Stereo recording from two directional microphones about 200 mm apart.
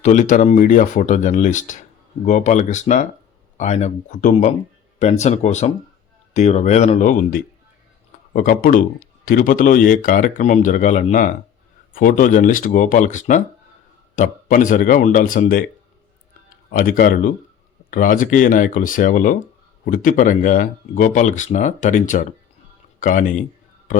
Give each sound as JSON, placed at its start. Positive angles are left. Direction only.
{"t": 0.0, "sound": "speech", "side_deg": 35}
{"t": 16.6, "sound": "speech", "side_deg": 45}